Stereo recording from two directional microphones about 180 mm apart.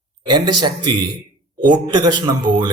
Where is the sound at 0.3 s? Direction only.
25° right (ahead or behind).